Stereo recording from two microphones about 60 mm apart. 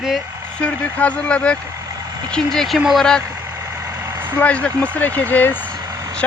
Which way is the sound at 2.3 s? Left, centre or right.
Centre.